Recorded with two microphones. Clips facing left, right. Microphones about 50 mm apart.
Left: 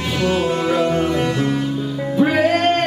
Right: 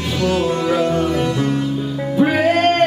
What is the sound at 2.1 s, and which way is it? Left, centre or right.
Music, centre.